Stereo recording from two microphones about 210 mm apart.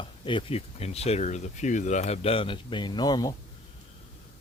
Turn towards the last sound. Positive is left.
turn(degrees=20)  # may be behind; listen again after turning